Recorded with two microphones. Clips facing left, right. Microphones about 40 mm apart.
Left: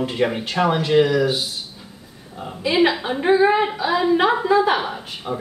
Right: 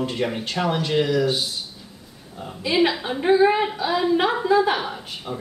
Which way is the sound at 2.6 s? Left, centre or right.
Centre.